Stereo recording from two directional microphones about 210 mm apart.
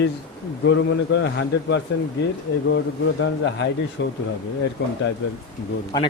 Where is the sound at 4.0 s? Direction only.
60° left (ahead or behind).